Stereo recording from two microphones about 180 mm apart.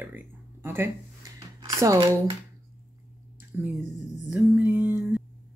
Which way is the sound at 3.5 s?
10° right (ahead or behind).